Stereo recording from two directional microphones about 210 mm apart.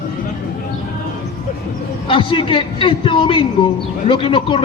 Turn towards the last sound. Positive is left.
turn(degrees=25)  # may be behind; listen again after turning